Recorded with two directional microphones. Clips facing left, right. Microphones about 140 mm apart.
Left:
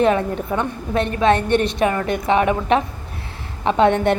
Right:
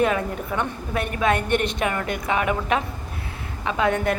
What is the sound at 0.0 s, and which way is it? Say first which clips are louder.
A woman's voice: left 5 dB; 25° left (ahead or behind).